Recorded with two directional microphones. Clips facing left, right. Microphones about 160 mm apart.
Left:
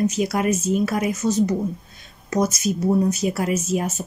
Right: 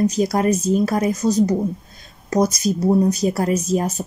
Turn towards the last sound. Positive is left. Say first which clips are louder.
# right 3 dB
turn(degrees=-35)  # may be behind; listen again after turning